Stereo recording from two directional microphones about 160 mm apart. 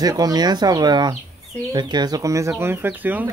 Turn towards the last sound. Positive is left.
turn(degrees=-10)  # may be behind; listen again after turning